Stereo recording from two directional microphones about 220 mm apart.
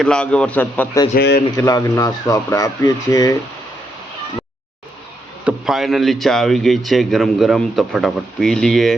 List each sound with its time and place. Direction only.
0.0 s speech: 5° left (ahead or behind)
5.5 s speech: centre (ahead or behind)